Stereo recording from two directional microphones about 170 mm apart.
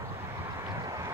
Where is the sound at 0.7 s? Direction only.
20° right (ahead or behind).